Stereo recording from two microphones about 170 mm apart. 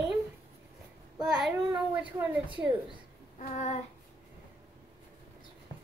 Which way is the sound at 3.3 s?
45° left (ahead or behind).